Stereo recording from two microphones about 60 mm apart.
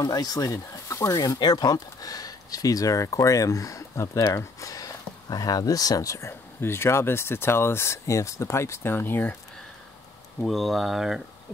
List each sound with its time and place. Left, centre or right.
0.0 s speech: left
6.6 s speech: left
10.4 s speech: centre